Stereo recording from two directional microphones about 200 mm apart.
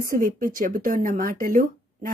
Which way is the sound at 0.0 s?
45° right (ahead or behind).